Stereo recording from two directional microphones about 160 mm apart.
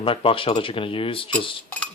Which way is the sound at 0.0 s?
35° left (ahead or behind).